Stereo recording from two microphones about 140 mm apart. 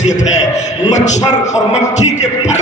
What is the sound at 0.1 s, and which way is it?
A man's voice, 60° left (ahead or behind).